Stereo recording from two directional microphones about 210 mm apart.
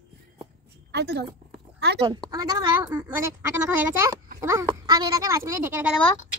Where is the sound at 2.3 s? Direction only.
20° right (ahead or behind).